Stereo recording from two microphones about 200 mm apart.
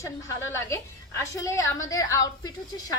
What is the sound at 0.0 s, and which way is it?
Speech, 15° left (ahead or behind).